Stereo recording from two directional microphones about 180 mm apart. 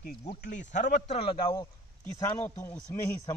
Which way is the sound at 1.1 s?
30° left (ahead or behind).